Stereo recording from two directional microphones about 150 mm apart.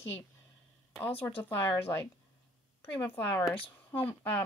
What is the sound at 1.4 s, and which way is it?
A woman's voice, 15° left (ahead or behind).